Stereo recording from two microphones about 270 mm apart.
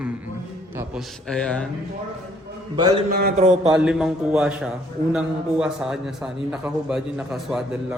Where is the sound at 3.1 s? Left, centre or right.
Right.